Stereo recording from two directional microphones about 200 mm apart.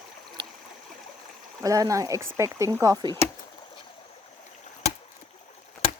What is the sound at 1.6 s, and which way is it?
Speech, 15° right (ahead or behind).